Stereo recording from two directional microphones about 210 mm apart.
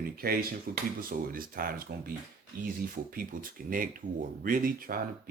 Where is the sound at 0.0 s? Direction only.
45° right (ahead or behind).